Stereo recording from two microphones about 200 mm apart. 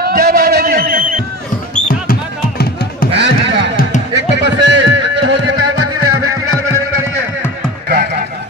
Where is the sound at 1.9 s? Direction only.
50° left (ahead or behind).